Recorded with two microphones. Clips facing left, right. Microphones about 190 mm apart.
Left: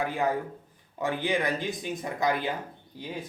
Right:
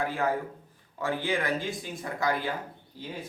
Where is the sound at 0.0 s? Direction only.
15° left (ahead or behind).